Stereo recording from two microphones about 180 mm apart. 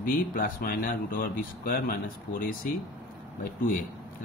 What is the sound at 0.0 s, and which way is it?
Speech, 50° left (ahead or behind).